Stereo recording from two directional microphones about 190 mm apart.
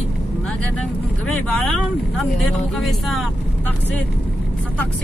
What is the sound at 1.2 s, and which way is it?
Speech, 5° left (ahead or behind).